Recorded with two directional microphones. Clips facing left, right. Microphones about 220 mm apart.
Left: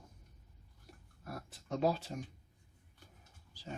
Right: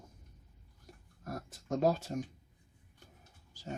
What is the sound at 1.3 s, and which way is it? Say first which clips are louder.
Speech: right 4 dB; 45° right (ahead or behind).